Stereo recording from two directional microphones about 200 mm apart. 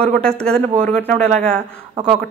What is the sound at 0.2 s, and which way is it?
Speech, 5° left (ahead or behind).